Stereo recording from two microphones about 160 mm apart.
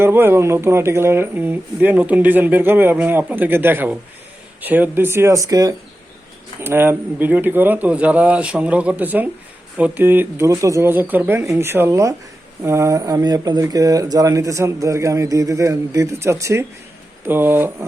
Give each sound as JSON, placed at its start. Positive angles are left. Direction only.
{"t": 0.0, "sound": "speech", "side_deg": -15}